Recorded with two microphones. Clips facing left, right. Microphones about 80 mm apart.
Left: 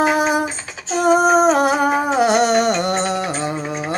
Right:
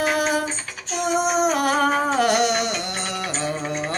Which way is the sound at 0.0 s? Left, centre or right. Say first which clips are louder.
Left 5 dB; left.